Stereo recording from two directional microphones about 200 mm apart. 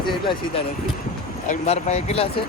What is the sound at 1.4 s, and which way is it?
Speech, 35° left (ahead or behind).